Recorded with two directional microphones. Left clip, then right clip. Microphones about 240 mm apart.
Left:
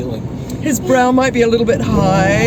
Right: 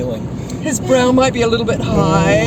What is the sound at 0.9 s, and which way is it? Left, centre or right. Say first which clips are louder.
Speech: even; centre.